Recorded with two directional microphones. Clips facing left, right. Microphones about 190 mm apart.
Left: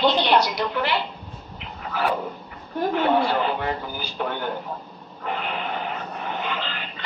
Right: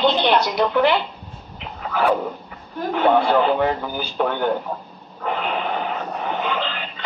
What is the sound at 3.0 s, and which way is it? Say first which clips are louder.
Speech: right 6 dB; 55° right (ahead or behind).